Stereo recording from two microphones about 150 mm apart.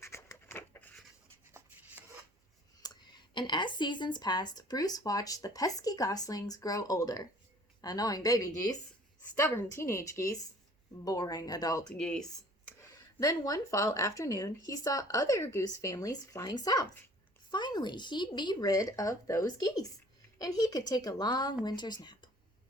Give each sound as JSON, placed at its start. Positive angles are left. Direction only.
{"t": 0.0, "sound": "a sound", "side_deg": 15}
{"t": 2.8, "sound": "speech", "side_deg": 25}
{"t": 11.9, "sound": "speech", "side_deg": 5}
{"t": 12.8, "sound": "speech", "side_deg": 25}